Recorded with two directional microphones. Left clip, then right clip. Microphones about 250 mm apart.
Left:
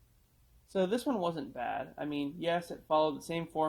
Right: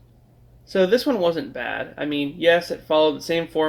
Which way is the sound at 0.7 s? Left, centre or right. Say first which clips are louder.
Right 13 dB; left.